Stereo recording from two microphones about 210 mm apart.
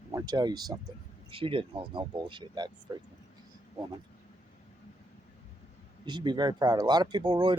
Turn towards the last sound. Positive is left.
turn(degrees=-20)  # may be behind; listen again after turning